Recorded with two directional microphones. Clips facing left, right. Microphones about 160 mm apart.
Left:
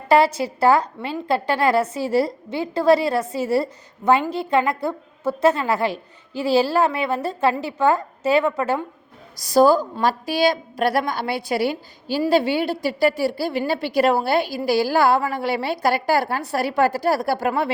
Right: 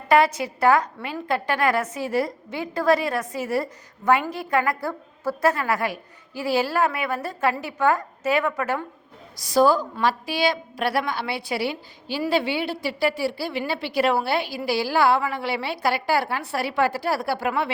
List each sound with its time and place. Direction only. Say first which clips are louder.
0.1 s a woman's voice: left 2 dB; 30° left (ahead or behind)
9.4 s a woman's voice: left 3 dB; 40° left (ahead or behind)